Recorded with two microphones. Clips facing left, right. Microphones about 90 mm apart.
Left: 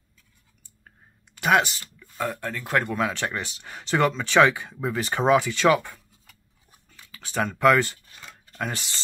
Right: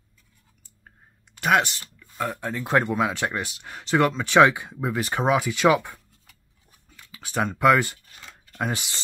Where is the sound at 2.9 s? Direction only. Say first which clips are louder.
Right 2 dB; 5° right (ahead or behind).